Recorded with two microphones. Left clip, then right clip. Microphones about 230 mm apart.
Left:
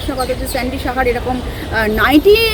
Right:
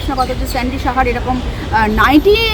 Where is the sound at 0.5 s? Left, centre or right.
Centre.